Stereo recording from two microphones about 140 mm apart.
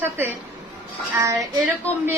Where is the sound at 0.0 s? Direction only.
15° right (ahead or behind).